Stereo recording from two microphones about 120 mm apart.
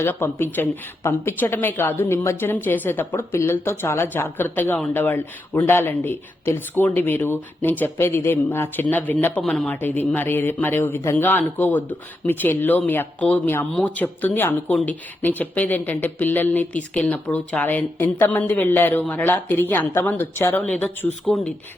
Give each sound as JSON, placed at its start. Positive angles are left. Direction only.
{"t": 0.0, "sound": "speech", "side_deg": 20}
{"t": 9.4, "sound": "speech", "side_deg": 0}
{"t": 9.6, "sound": "speech", "side_deg": 15}